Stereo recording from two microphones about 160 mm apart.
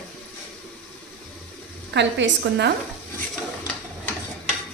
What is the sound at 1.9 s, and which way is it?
Speech, 90° right.